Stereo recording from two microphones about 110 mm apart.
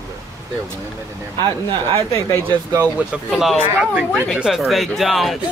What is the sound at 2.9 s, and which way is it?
Speech, 5° right (ahead or behind).